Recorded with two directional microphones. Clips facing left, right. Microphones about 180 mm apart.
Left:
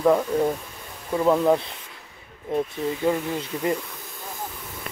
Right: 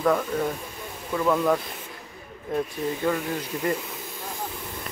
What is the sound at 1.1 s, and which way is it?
Speech, 25° left (ahead or behind).